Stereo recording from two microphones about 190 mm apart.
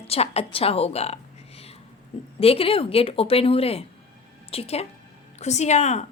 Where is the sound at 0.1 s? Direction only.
30° left (ahead or behind).